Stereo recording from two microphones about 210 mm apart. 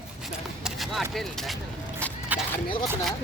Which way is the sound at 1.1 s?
Centre (ahead or behind).